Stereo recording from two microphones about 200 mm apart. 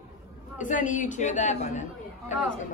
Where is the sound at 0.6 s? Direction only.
40° left (ahead or behind).